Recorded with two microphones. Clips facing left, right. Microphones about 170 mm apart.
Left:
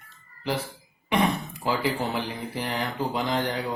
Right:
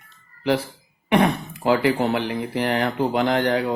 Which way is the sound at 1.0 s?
60° right (ahead or behind).